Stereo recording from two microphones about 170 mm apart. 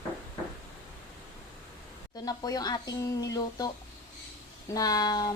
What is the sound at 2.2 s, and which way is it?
Speech, 20° left (ahead or behind).